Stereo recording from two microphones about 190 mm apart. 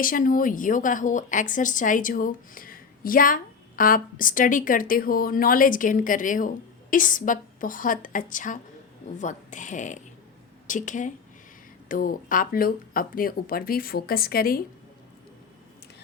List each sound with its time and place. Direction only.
0.0 s a woman's voice: 45° left (ahead or behind)